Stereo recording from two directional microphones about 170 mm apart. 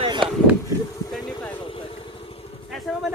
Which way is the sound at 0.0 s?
30° right (ahead or behind).